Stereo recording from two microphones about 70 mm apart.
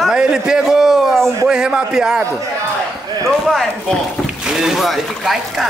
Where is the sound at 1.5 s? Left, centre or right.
Centre.